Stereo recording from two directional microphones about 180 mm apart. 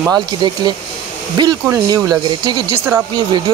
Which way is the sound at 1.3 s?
20° right (ahead or behind).